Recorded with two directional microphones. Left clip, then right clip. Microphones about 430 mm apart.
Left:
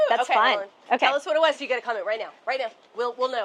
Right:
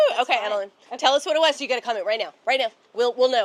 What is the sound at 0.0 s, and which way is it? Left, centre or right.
A woman's voice, right.